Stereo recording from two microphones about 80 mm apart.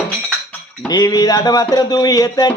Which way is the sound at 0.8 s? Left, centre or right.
Left.